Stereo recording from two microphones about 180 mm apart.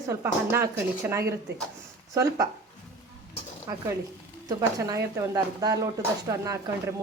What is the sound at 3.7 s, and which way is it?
A woman's voice, 15° right (ahead or behind).